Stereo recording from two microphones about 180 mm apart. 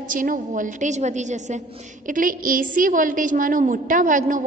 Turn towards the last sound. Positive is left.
turn(degrees=-45)  # may be behind; listen again after turning